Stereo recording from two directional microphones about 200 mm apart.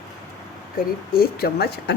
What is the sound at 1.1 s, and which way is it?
Speech, 50° left (ahead or behind).